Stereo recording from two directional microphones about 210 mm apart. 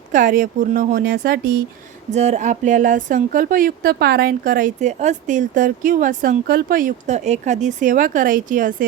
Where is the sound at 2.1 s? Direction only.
30° right (ahead or behind).